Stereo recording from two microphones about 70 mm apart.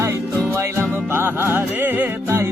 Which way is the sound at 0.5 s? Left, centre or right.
Right.